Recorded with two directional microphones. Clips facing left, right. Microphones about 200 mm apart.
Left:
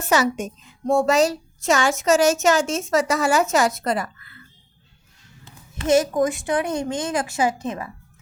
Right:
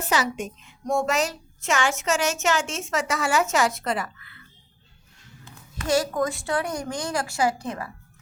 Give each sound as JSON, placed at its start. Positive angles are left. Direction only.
{"t": 0.6, "sound": "a woman's voice", "side_deg": 35}
{"t": 5.5, "sound": "a woman's voice", "side_deg": 25}